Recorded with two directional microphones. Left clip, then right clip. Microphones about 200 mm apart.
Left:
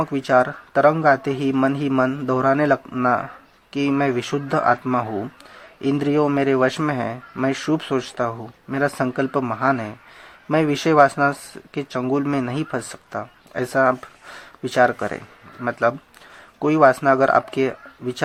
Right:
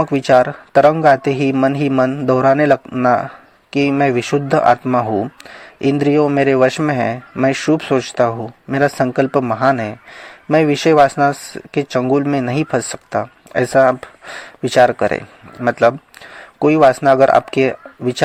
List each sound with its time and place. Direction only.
0.0 s a man's voice: 35° right (ahead or behind)